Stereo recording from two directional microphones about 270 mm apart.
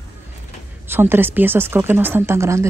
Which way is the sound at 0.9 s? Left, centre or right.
Centre.